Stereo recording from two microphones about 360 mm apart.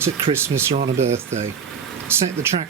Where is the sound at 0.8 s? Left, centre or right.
Centre.